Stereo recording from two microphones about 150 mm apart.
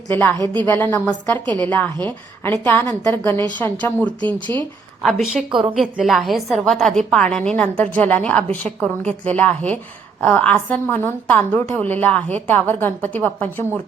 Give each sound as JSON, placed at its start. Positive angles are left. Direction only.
{"t": 0.1, "sound": "a woman's voice", "side_deg": 10}